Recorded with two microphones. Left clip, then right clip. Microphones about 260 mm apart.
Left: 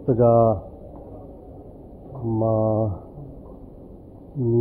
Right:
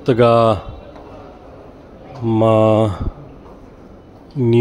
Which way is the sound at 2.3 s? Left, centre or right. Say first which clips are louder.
Right 9 dB; right.